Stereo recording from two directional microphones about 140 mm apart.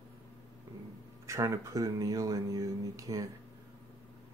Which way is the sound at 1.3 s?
20° right (ahead or behind).